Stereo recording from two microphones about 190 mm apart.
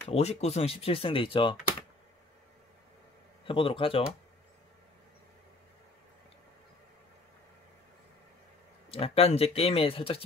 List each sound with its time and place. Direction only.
0.1 s speech: 35° left (ahead or behind)
3.4 s speech: 25° left (ahead or behind)
8.9 s speech: 30° left (ahead or behind)